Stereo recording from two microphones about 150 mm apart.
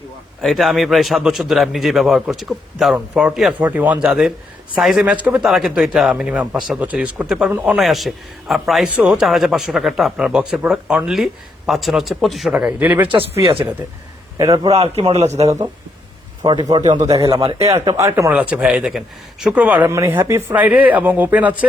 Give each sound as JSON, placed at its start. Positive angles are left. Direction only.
{"t": 0.4, "sound": "a man's voice", "side_deg": 0}
{"t": 14.3, "sound": "speech", "side_deg": -25}
{"t": 14.7, "sound": "a man's voice", "side_deg": -40}
{"t": 16.4, "sound": "a man's voice", "side_deg": -30}
{"t": 18.3, "sound": "speech", "side_deg": -5}